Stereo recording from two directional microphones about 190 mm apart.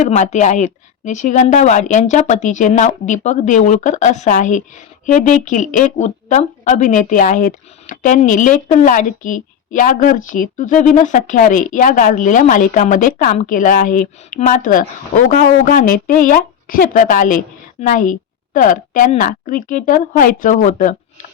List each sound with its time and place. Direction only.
0.0 s a woman's voice: 35° left (ahead or behind)